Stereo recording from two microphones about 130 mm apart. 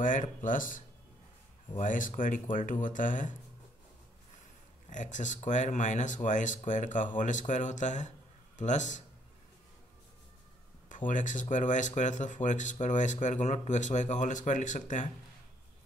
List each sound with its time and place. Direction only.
0.0 s speech: 85° left
4.8 s speech: 70° left (ahead or behind)
10.9 s speech: 80° left